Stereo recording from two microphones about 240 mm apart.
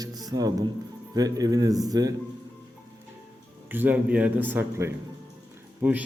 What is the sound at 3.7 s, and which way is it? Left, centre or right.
A man's voice, centre.